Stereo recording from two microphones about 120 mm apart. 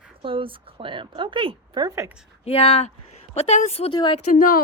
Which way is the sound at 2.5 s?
55° left (ahead or behind).